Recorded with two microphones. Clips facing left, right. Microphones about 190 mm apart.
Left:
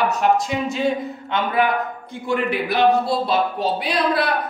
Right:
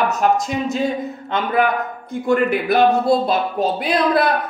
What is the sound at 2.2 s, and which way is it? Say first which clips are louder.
A man's voice: right 4 dB; 50° right (ahead or behind).